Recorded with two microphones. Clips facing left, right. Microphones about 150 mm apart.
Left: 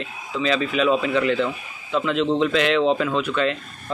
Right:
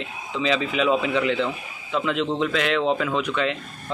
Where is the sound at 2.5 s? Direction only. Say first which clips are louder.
Left 3 dB; 5° right (ahead or behind).